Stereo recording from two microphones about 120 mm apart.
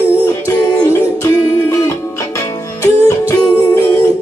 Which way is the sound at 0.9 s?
20° left (ahead or behind).